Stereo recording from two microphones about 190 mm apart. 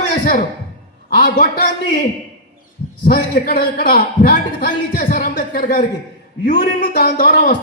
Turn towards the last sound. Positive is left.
turn(degrees=45)  # may be behind; listen again after turning